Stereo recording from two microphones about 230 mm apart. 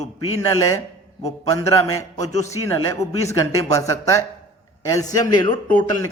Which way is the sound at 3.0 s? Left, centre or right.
Left.